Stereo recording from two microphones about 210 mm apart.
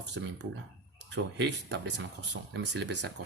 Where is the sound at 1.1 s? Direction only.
55° right (ahead or behind).